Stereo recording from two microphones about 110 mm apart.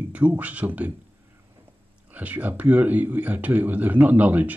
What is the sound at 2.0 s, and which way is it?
Speech, 15° right (ahead or behind).